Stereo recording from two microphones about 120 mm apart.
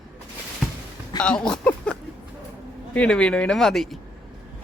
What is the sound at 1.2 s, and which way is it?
Speech, 10° left (ahead or behind).